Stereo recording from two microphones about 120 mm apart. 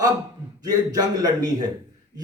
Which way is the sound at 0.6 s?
30° right (ahead or behind).